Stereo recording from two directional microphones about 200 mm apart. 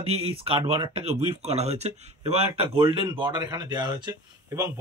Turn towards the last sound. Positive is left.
turn(degrees=-15)  # may be behind; listen again after turning